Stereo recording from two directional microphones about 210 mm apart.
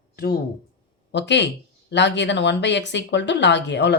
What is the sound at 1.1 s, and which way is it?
Speech, 55° left (ahead or behind).